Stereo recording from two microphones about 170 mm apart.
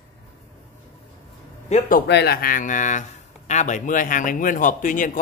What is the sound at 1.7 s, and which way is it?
Speech, 55° left (ahead or behind).